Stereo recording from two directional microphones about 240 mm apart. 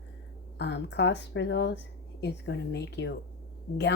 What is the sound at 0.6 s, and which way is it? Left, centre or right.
Speech, left.